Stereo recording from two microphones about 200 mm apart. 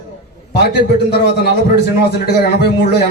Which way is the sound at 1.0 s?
55° left (ahead or behind).